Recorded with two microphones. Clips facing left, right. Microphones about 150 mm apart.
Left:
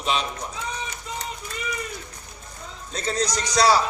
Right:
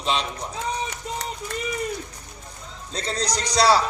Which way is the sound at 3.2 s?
30° right (ahead or behind).